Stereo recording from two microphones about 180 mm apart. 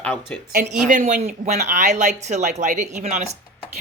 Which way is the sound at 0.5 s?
50° right (ahead or behind).